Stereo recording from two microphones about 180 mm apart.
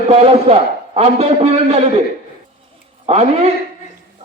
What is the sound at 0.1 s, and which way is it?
A man's voice, 35° right (ahead or behind).